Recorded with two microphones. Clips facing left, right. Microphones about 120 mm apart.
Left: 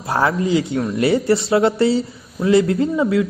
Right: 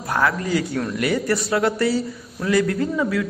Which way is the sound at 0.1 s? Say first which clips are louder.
Left 4 dB; 25° left (ahead or behind).